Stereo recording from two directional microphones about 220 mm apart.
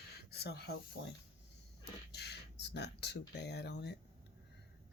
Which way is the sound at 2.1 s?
50° left (ahead or behind).